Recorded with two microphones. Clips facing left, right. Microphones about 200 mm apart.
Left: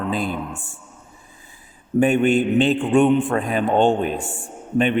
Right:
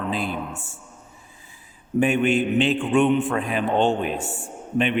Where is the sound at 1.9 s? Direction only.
45° left (ahead or behind).